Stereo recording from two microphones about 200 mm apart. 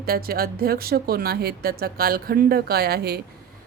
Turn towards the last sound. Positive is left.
turn(degrees=-50)  # may be behind; listen again after turning